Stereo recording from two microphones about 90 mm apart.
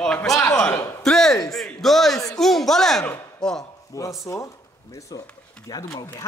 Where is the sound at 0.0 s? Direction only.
10° left (ahead or behind).